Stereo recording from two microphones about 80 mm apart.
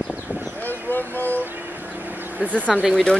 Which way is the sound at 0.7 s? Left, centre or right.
Left.